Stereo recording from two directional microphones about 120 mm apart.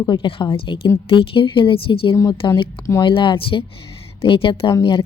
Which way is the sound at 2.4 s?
35° left (ahead or behind).